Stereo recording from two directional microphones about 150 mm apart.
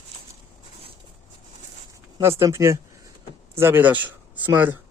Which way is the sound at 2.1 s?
20° right (ahead or behind).